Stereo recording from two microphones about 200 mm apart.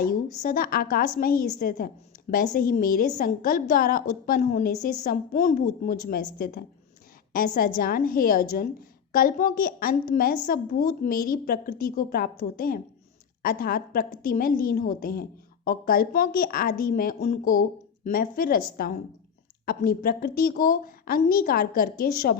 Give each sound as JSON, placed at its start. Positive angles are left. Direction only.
{"t": 0.0, "sound": "a woman's voice", "side_deg": 45}